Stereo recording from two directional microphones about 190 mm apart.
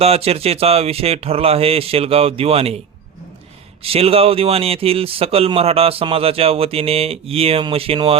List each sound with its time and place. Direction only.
0.0 s speech: 30° right (ahead or behind)
3.8 s speech: 30° right (ahead or behind)